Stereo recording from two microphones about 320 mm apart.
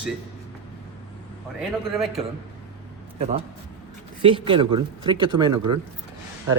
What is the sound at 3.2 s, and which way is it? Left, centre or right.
A man's voice, centre.